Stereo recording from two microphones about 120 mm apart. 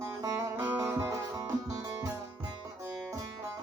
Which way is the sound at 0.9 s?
25° right (ahead or behind).